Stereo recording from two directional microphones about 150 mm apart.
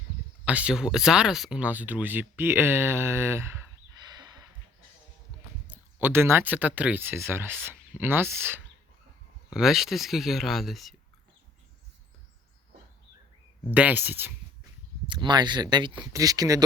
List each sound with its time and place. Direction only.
0.4 s speech: 10° right (ahead or behind)
4.2 s a sound: 25° right (ahead or behind)
5.6 s speech: 10° right (ahead or behind)
9.5 s speech: 5° right (ahead or behind)
13.7 s speech: 10° right (ahead or behind)
15.0 s speech: 30° right (ahead or behind)